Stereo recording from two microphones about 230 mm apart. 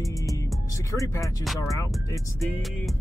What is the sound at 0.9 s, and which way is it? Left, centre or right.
Speech, centre.